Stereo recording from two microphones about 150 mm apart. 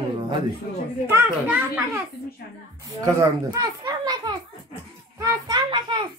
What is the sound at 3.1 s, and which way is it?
A child's voice, 25° right (ahead or behind).